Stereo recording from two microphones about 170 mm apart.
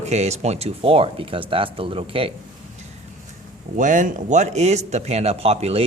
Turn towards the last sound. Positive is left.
turn(degrees=-35)  # may be behind; listen again after turning